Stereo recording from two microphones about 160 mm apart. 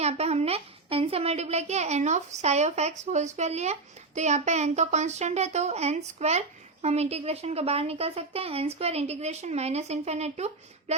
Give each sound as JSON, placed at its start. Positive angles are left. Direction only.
{"t": 0.0, "sound": "a child's voice", "side_deg": -40}